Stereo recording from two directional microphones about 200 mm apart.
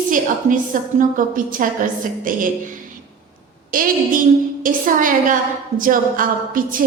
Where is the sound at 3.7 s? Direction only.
45° right (ahead or behind).